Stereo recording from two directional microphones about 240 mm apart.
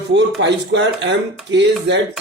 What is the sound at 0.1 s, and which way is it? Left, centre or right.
A man's voice, right.